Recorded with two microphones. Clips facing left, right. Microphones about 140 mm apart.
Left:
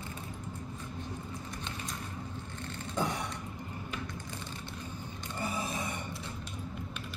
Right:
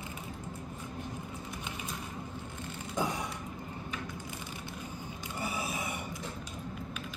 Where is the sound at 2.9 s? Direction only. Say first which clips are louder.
Even; 10° right (ahead or behind).